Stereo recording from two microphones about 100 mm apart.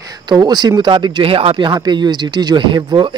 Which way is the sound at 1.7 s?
45° right (ahead or behind).